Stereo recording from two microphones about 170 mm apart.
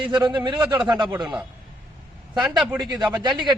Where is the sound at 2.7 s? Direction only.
25° right (ahead or behind).